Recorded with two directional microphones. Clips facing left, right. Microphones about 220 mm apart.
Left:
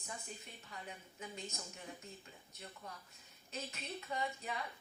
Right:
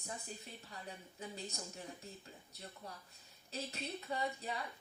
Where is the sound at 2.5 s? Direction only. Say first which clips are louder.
Even; 35° right (ahead or behind).